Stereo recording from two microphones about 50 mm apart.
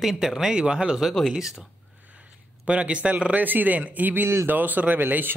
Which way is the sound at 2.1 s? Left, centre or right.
Right.